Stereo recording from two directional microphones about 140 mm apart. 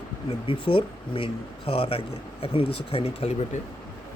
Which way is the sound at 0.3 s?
40° left (ahead or behind).